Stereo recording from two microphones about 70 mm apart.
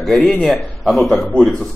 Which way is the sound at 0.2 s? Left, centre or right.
Centre.